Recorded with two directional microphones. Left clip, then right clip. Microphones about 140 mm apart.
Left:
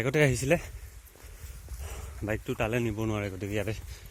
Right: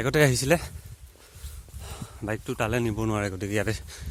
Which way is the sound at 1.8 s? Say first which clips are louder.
Right 2 dB; 10° right (ahead or behind).